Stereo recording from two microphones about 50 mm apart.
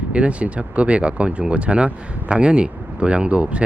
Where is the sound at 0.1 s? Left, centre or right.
Right.